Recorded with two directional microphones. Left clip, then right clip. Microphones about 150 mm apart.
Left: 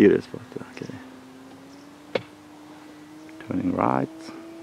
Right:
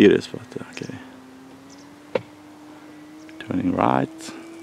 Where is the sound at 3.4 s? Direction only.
25° right (ahead or behind).